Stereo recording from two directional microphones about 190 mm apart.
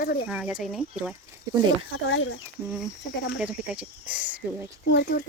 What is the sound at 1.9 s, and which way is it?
Speech, 90° left.